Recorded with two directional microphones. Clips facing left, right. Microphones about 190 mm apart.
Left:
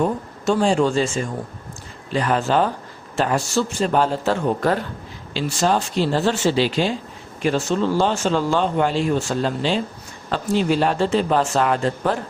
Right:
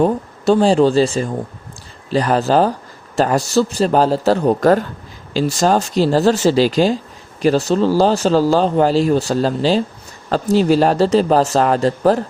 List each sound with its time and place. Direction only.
0.0 s speech: 35° right (ahead or behind)